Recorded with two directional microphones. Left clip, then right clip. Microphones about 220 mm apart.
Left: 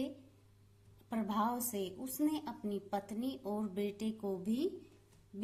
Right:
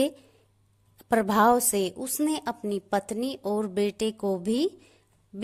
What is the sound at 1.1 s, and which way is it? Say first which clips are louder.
A woman's voice: right 16 dB; 45° right (ahead or behind).